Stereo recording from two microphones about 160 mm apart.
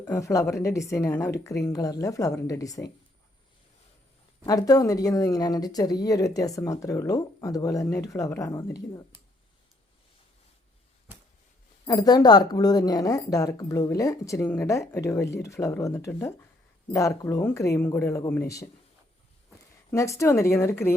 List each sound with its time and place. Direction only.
0.0 s speech: 15° left (ahead or behind)
4.4 s speech: 20° left (ahead or behind)
11.9 s speech: 25° left (ahead or behind)
19.9 s speech: 20° left (ahead or behind)